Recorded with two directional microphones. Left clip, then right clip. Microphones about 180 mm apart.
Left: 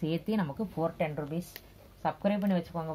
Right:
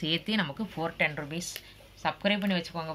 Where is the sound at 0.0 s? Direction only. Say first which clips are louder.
Right 4 dB; 30° left (ahead or behind).